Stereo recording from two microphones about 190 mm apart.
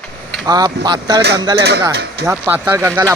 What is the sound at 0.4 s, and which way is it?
Speech, 20° right (ahead or behind).